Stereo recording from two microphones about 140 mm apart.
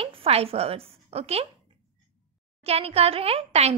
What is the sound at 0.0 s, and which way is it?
A woman's voice, 45° right (ahead or behind).